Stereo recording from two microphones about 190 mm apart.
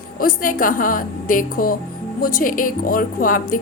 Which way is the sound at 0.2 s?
45° left (ahead or behind).